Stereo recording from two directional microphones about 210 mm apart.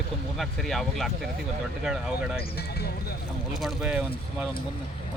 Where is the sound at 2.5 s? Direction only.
50° left (ahead or behind).